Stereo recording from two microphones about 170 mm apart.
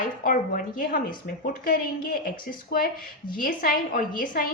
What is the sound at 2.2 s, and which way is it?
Speech, 55° left (ahead or behind).